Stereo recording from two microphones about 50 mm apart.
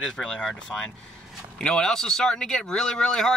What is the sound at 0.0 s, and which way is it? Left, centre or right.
Speech, centre.